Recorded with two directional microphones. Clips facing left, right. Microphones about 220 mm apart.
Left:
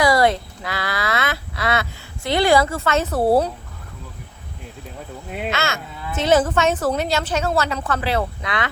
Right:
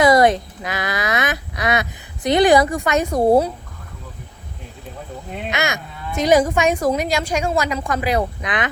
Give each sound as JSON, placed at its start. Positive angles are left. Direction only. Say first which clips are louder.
{"t": 0.0, "sound": "speech", "louder": "right 3 dB", "side_deg": -20}
{"t": 5.5, "sound": "a woman's voice", "louder": "right 2 dB", "side_deg": -15}